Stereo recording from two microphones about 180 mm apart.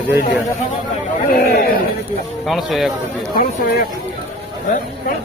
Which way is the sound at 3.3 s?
55° left (ahead or behind).